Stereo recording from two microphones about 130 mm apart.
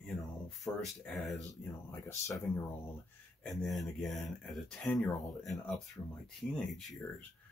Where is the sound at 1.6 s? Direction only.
15° left (ahead or behind).